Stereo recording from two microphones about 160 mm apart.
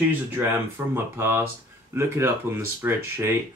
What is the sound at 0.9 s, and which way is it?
Speech, 15° right (ahead or behind).